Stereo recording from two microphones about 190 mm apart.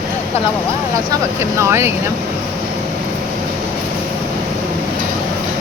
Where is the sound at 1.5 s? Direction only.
15° right (ahead or behind).